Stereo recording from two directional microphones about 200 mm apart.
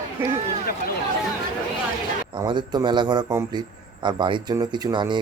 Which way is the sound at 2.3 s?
20° right (ahead or behind).